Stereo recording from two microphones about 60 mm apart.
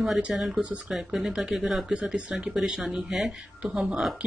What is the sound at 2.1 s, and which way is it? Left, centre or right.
Speech, centre.